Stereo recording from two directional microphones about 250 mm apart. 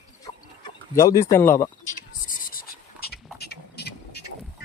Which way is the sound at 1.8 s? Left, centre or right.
Left.